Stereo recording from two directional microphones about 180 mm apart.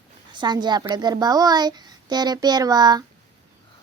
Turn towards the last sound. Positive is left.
turn(degrees=-20)  # may be behind; listen again after turning